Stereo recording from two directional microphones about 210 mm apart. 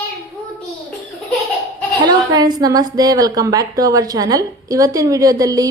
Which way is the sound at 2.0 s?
20° right (ahead or behind).